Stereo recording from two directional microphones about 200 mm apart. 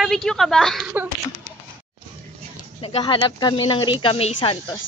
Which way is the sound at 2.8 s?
25° left (ahead or behind).